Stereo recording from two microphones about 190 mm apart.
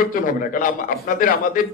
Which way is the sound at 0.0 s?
50° left (ahead or behind).